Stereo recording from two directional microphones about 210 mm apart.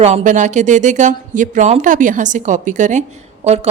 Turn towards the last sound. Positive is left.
turn(degrees=-30)  # may be behind; listen again after turning